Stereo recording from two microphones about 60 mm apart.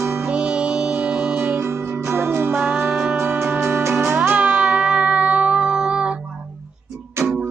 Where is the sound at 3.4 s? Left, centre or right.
Right.